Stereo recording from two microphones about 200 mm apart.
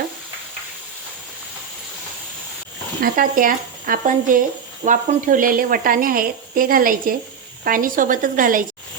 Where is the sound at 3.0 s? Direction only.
45° right (ahead or behind).